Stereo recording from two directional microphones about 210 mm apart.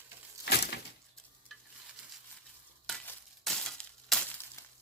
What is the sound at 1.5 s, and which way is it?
Stir, centre (ahead or behind).